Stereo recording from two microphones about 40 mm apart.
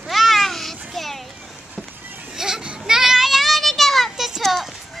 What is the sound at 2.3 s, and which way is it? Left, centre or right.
Children playing, centre.